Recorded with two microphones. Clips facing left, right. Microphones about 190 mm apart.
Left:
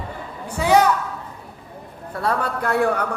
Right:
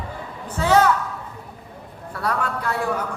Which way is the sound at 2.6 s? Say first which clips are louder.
Left 8 dB; 60° left (ahead or behind).